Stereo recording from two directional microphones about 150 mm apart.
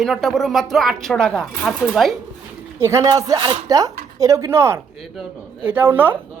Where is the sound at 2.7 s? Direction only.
20° right (ahead or behind).